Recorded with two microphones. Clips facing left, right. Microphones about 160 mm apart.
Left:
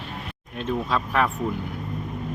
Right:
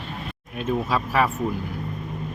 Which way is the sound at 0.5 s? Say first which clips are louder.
Right 1 dB; 5° right (ahead or behind).